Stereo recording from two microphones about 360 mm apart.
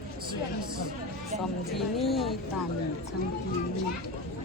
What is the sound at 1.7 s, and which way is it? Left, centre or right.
Speech, centre.